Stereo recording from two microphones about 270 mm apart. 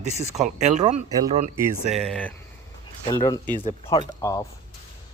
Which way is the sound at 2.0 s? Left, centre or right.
Centre.